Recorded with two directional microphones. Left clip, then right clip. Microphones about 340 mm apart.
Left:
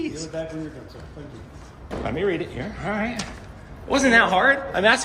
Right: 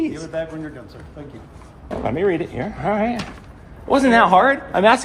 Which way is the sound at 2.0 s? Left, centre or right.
Centre.